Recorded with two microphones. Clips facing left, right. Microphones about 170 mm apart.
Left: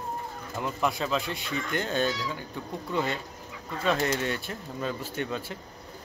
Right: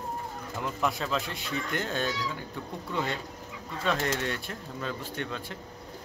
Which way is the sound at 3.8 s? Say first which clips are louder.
Left 2 dB; 5° left (ahead or behind).